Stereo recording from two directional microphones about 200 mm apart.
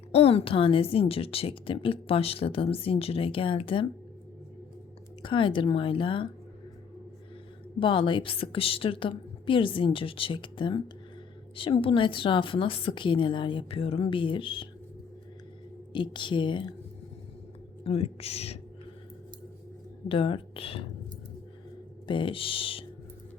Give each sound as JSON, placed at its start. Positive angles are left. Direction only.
{"t": 0.1, "sound": "a woman's voice", "side_deg": 30}
{"t": 5.2, "sound": "a woman's voice", "side_deg": 25}
{"t": 7.8, "sound": "a woman's voice", "side_deg": 25}
{"t": 15.9, "sound": "a woman's voice", "side_deg": 25}
{"t": 17.8, "sound": "a woman's voice", "side_deg": 30}
{"t": 20.1, "sound": "a woman's voice", "side_deg": 25}
{"t": 22.0, "sound": "a woman's voice", "side_deg": 25}